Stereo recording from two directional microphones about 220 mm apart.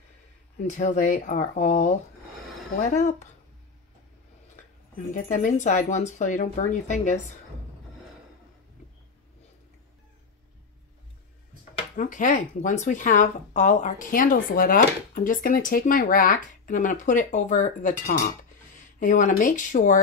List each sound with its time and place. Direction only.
0.6 s speech: 35° left (ahead or behind)
5.1 s speech: 35° left (ahead or behind)
11.7 s speech: 35° left (ahead or behind)